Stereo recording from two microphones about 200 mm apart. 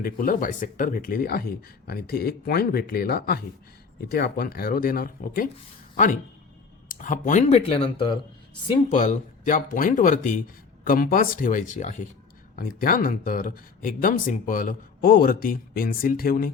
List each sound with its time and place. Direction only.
0.0 s speech: 45° left (ahead or behind)
7.0 s speech: 40° left (ahead or behind)
8.9 s speech: 40° left (ahead or behind)